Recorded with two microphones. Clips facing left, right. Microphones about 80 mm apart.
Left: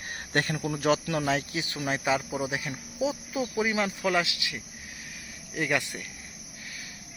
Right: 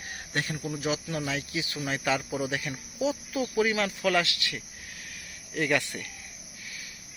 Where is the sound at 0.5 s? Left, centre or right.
Left.